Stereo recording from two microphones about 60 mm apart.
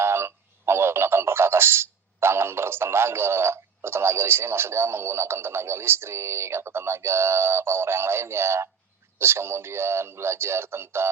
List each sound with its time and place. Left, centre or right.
0.0 s telephone: right
9.1 s speech: right